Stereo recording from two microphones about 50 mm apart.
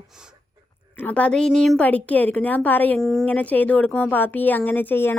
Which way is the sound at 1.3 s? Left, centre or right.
Centre.